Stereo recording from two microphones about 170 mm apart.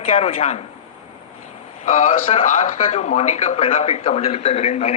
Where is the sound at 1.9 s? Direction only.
50° left (ahead or behind).